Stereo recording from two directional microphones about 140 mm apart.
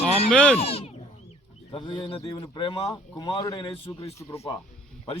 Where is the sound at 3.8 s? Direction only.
20° left (ahead or behind).